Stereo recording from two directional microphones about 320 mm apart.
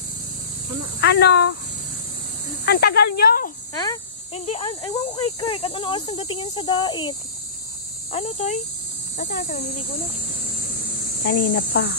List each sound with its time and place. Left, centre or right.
1.0 s speech: left
2.6 s speech: left
3.7 s speech: centre; by 9.8 s left
11.2 s speech: left